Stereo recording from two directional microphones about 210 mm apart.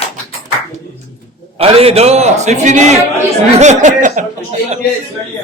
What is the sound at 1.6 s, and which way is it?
A man's voice, 30° right (ahead or behind).